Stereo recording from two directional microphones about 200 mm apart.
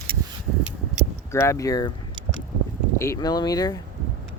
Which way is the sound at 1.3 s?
15° left (ahead or behind).